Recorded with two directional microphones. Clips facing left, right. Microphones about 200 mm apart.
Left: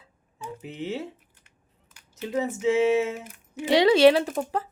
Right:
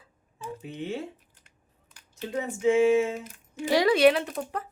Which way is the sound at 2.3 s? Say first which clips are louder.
Even; 20° left (ahead or behind).